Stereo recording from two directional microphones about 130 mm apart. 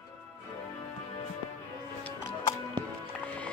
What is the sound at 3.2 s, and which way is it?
Music, 10° left (ahead or behind).